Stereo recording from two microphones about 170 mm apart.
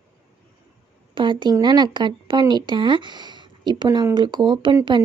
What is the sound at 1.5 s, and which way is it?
Speech, 25° right (ahead or behind).